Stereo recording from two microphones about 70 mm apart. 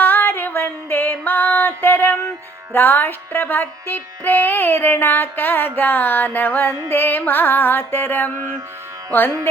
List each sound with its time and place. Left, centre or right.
0.0 s female singing: left
2.7 s music: left